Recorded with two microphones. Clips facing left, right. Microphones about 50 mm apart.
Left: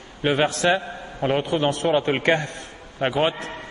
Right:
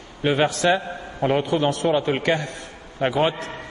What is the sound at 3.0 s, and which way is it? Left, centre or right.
Speech, centre.